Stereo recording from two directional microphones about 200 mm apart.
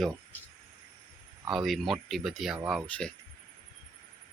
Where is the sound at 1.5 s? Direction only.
Centre (ahead or behind).